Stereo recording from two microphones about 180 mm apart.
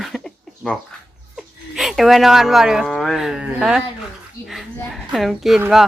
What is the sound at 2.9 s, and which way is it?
Speech, centre (ahead or behind).